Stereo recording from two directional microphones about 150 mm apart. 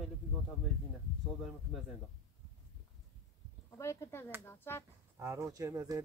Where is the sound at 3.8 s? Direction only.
20° left (ahead or behind).